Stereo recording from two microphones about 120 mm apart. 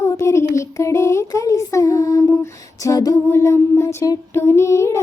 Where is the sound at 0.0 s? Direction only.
25° left (ahead or behind).